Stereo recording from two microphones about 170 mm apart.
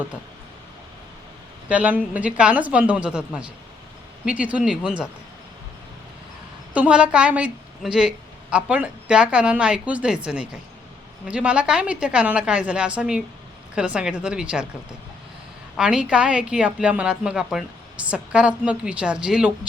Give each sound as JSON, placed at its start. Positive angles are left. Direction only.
{"t": 1.7, "sound": "a woman's voice", "side_deg": -10}
{"t": 6.7, "sound": "a woman's voice", "side_deg": -5}
{"t": 11.3, "sound": "a woman's voice", "side_deg": -5}
{"t": 15.7, "sound": "a woman's voice", "side_deg": -5}